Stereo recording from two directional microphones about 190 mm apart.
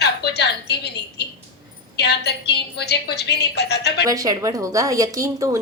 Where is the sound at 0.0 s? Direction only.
60° left (ahead or behind).